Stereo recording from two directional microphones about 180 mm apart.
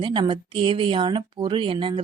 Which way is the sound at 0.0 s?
25° right (ahead or behind).